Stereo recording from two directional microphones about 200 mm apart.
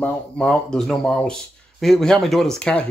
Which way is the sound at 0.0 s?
5° left (ahead or behind).